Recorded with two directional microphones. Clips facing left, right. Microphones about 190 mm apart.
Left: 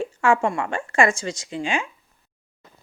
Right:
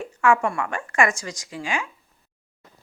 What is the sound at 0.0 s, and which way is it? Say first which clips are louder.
Speech: even; 30° left (ahead or behind).